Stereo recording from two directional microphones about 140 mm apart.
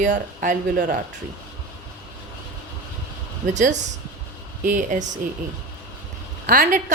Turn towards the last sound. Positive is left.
turn(degrees=-75)  # may be behind; listen again after turning